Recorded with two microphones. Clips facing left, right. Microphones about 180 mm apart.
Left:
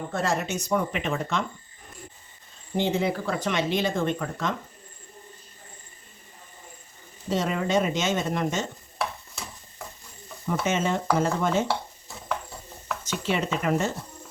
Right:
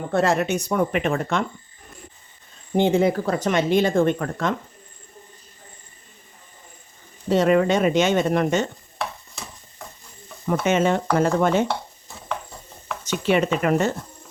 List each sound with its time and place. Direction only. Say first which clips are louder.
0.1 s speech: right 8 dB; 65° right (ahead or behind)
2.7 s speech: right 7 dB; 50° right (ahead or behind)
7.3 s speech: right 8 dB; 65° right (ahead or behind)
10.4 s speech: right 6 dB; 60° right (ahead or behind)
13.2 s speech: right 6 dB; 65° right (ahead or behind)